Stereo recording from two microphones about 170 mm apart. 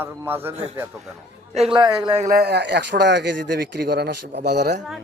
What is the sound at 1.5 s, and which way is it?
Speech, 30° right (ahead or behind).